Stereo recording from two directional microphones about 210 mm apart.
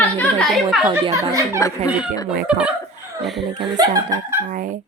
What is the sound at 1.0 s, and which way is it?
Speech, 15° right (ahead or behind).